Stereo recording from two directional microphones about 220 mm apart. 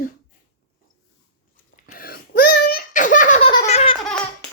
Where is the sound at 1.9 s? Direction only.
40° left (ahead or behind).